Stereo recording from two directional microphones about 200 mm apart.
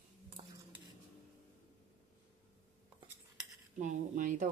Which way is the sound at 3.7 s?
40° right (ahead or behind).